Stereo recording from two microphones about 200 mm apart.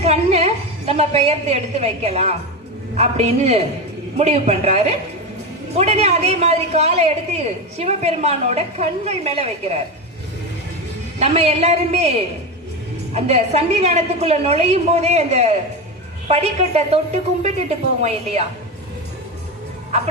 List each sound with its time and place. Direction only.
0.0 s a woman's voice: 30° right (ahead or behind)
11.2 s a man's voice: 30° right (ahead or behind)
18.0 s a man's voice: 30° right (ahead or behind)